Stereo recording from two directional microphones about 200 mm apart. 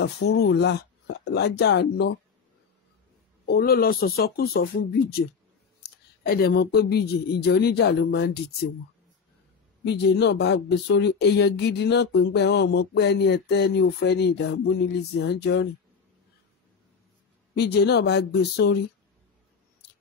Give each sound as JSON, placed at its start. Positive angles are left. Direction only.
{"t": 0.0, "sound": "speech", "side_deg": 55}
{"t": 3.4, "sound": "speech", "side_deg": 50}
{"t": 5.9, "sound": "speech", "side_deg": 50}
{"t": 9.8, "sound": "speech", "side_deg": 55}
{"t": 17.6, "sound": "speech", "side_deg": 55}